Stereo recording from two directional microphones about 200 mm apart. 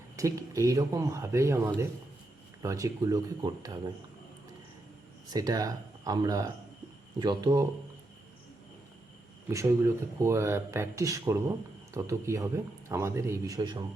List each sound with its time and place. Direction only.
0.2 s speech: 15° right (ahead or behind)
5.3 s speech: 20° right (ahead or behind)
9.5 s speech: 15° right (ahead or behind)